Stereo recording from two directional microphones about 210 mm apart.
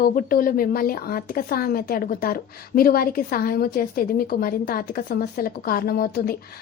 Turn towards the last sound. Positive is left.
turn(degrees=45)  # may be behind; listen again after turning